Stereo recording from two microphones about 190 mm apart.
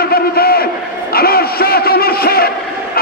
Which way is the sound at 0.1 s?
55° left (ahead or behind).